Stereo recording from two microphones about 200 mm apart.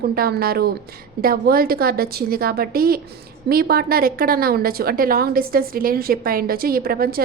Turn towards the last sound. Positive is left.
turn(degrees=-50)  # may be behind; listen again after turning